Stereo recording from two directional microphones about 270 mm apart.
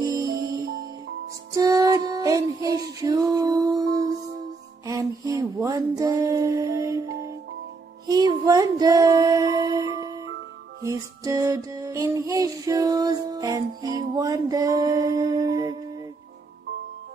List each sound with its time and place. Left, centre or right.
0.0 s music: centre
1.5 s music: centre
4.8 s a sound: centre
8.1 s music: centre